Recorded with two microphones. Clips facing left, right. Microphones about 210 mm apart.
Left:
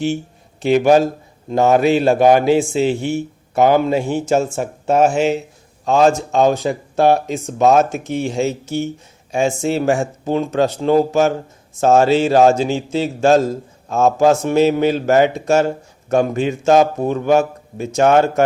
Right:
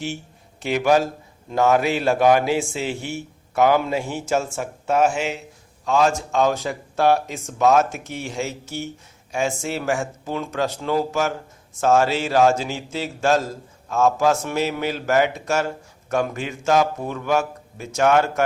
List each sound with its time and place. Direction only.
0.6 s a man's voice: 25° left (ahead or behind)